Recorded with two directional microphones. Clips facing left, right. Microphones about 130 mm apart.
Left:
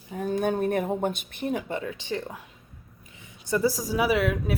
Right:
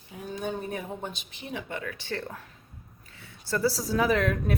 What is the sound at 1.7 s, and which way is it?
Speech, 25° left (ahead or behind).